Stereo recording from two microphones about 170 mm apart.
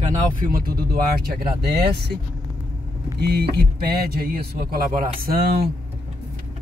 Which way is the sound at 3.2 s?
75° right (ahead or behind).